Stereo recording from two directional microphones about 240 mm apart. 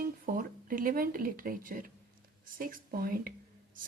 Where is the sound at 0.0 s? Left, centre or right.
Right.